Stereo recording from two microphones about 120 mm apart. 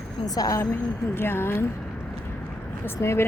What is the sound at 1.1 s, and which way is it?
Speech, 20° left (ahead or behind).